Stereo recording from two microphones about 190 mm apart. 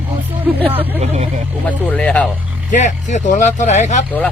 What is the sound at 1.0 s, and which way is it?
Speech, 35° right (ahead or behind).